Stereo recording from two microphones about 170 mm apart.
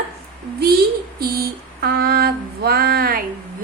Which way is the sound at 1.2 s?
65° right (ahead or behind).